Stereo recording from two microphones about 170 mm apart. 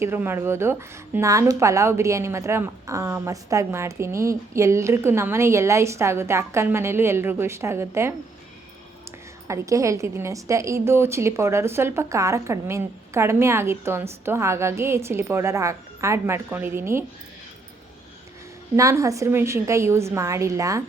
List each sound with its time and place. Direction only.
0.0 s a woman's voice: 15° right (ahead or behind)
9.5 s a woman's voice: 20° right (ahead or behind)
18.8 s a woman's voice: 20° right (ahead or behind)